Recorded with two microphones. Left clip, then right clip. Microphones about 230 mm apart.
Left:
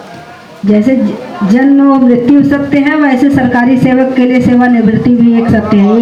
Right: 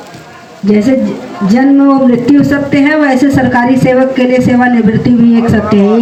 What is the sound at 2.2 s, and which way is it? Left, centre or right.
A man's voice, right.